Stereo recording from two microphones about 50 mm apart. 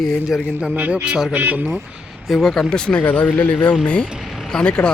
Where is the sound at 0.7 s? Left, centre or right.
Right.